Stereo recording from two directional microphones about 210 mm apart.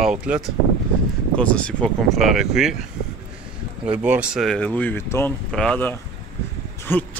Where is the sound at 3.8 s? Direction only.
5° right (ahead or behind).